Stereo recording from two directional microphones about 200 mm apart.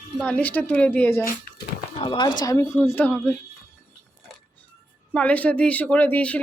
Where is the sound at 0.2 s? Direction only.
5° left (ahead or behind).